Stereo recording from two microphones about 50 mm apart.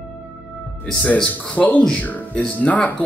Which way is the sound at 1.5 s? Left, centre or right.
Left.